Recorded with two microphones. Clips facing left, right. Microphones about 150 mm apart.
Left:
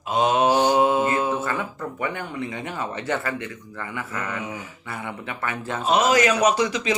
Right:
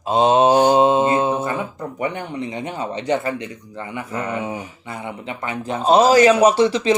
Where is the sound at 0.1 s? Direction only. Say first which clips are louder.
Right 5 dB; 25° right (ahead or behind).